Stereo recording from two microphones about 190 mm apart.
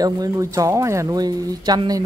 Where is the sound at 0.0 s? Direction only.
20° right (ahead or behind).